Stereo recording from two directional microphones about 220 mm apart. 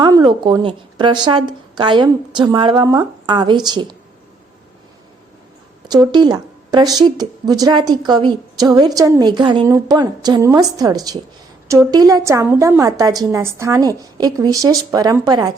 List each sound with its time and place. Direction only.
0.0 s speech: 20° right (ahead or behind)
5.9 s a woman's voice: 20° right (ahead or behind)